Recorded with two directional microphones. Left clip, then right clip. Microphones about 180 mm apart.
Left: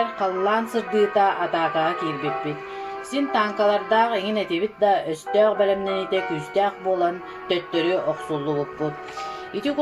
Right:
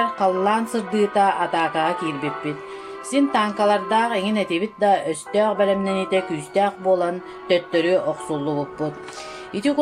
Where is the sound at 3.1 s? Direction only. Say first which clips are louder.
Right 3 dB; 55° right (ahead or behind).